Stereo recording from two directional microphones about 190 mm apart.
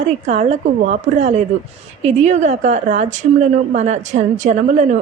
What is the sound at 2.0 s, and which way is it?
A woman's voice, 35° right (ahead or behind).